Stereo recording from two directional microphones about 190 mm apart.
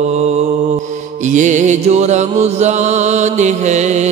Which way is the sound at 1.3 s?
40° right (ahead or behind).